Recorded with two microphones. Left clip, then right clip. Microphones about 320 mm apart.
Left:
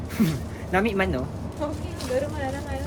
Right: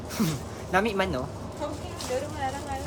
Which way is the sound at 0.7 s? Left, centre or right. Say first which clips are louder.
Left 2 dB; centre.